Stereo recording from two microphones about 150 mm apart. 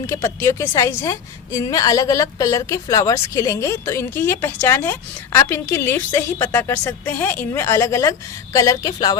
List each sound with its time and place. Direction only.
0.1 s a woman's voice: 15° left (ahead or behind)